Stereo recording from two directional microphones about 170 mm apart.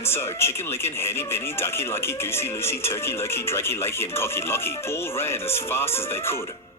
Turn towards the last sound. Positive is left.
turn(degrees=15)  # may be behind; listen again after turning